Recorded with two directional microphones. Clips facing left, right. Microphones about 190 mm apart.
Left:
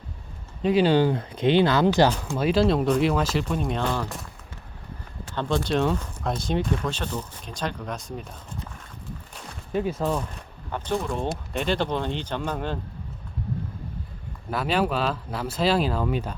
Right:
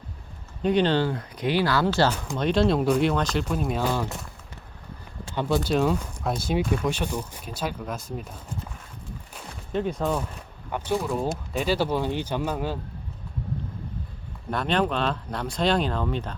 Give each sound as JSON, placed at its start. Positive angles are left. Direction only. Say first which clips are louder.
{"t": 0.6, "sound": "speech", "louder": "left 2 dB", "side_deg": 5}
{"t": 2.3, "sound": "speech", "louder": "left 1 dB", "side_deg": 5}
{"t": 5.3, "sound": "speech", "louder": "right 1 dB", "side_deg": -10}
{"t": 9.7, "sound": "speech", "louder": "even", "side_deg": 5}
{"t": 10.7, "sound": "speech", "louder": "right 1 dB", "side_deg": -10}
{"t": 14.5, "sound": "speech", "louder": "even", "side_deg": 5}